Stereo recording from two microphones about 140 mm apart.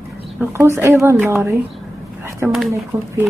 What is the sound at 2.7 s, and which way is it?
Speech, 20° right (ahead or behind).